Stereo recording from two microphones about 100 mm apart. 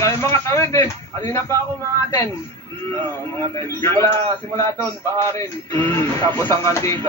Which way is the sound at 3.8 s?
25° left (ahead or behind).